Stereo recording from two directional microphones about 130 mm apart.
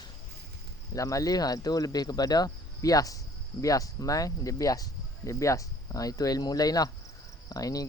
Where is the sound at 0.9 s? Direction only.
25° left (ahead or behind).